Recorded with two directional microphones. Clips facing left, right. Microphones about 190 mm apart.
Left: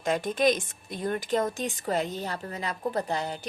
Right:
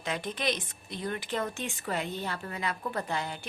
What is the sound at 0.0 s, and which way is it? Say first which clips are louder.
Speech: left 8 dB; 45° left (ahead or behind).